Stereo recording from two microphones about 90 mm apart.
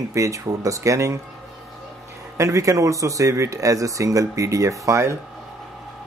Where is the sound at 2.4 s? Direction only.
35° right (ahead or behind).